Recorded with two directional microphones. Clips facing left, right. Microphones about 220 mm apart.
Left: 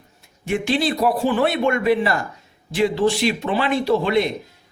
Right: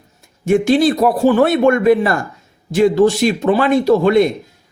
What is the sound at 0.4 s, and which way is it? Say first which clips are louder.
Speech: right 8 dB; 45° right (ahead or behind).